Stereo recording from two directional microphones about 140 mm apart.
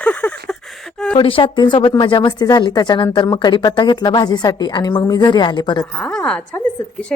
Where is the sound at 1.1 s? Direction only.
40° left (ahead or behind).